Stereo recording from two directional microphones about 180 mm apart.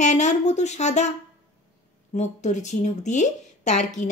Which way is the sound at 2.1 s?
40° left (ahead or behind).